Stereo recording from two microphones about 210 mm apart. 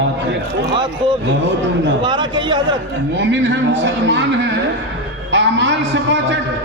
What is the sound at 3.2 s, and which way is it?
A man's voice, 60° right (ahead or behind).